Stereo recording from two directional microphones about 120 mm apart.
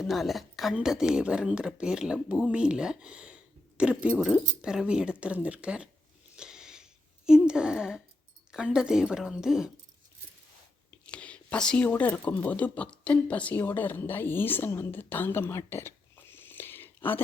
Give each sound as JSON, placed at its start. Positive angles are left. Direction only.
{"t": 0.0, "sound": "a woman's voice", "side_deg": 0}
{"t": 6.3, "sound": "a sound", "side_deg": -5}
{"t": 7.3, "sound": "a woman's voice", "side_deg": -5}
{"t": 11.0, "sound": "speech", "side_deg": 10}